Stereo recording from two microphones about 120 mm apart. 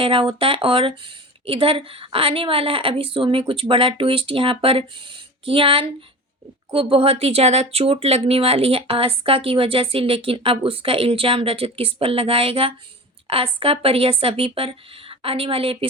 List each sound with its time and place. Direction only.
0.0 s speech: 45° right (ahead or behind)